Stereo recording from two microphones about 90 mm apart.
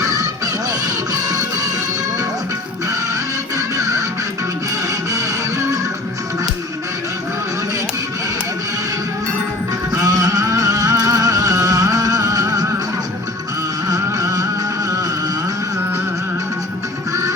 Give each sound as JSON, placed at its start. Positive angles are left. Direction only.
{"t": 3.8, "sound": "music", "side_deg": -35}
{"t": 10.0, "sound": "music", "side_deg": -40}
{"t": 13.9, "sound": "music", "side_deg": -40}